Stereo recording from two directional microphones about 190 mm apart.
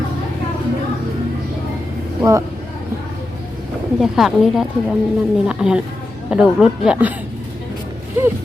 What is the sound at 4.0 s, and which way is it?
Speech, centre (ahead or behind).